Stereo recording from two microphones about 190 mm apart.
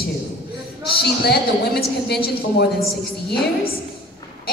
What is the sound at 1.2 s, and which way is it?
A woman's voice, 55° left (ahead or behind).